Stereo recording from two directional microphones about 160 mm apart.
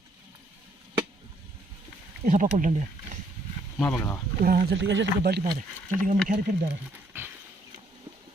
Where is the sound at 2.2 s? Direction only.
55° right (ahead or behind).